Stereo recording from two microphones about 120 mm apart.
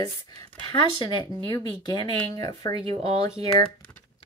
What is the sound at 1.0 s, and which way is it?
Speech, 40° left (ahead or behind).